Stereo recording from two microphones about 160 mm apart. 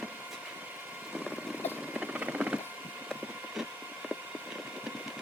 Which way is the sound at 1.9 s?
10° right (ahead or behind).